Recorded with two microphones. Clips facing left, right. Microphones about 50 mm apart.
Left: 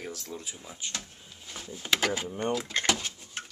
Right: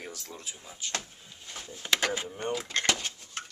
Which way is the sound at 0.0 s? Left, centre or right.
Centre.